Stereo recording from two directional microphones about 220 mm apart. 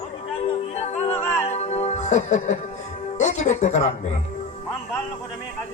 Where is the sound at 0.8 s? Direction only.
30° left (ahead or behind).